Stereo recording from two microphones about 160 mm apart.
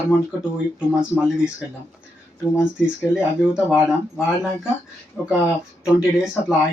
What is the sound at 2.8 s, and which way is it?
Speech, 5° right (ahead or behind).